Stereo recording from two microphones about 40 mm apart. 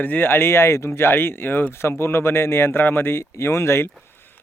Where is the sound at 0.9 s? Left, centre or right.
Left.